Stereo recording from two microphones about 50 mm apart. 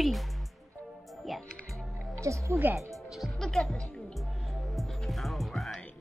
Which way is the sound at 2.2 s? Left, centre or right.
Right.